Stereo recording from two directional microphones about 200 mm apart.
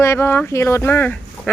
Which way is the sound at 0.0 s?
10° left (ahead or behind).